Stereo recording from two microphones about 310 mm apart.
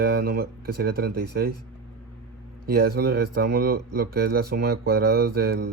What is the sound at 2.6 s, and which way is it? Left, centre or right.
Speech, right.